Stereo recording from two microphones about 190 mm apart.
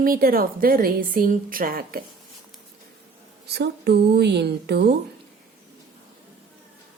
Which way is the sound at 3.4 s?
60° right (ahead or behind).